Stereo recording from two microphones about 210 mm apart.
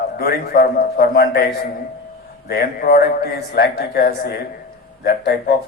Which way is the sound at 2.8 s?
45° left (ahead or behind).